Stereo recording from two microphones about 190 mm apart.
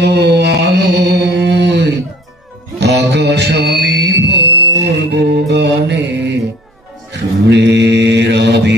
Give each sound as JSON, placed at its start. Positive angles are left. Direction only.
{"t": 0.0, "sound": "mantra", "side_deg": -60}
{"t": 2.8, "sound": "music", "side_deg": -60}
{"t": 7.1, "sound": "mantra", "side_deg": -60}